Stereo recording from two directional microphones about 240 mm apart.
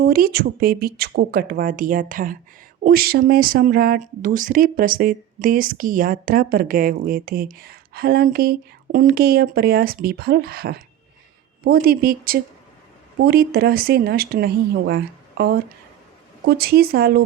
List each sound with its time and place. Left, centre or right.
0.0 s speech: right